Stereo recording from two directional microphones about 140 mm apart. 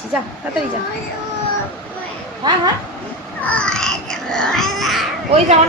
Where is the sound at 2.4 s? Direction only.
30° right (ahead or behind).